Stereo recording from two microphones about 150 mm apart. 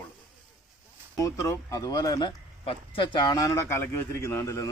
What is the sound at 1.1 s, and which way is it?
Speech, 20° left (ahead or behind).